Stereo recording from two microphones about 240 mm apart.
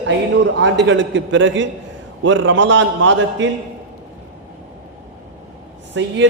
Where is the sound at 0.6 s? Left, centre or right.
Right.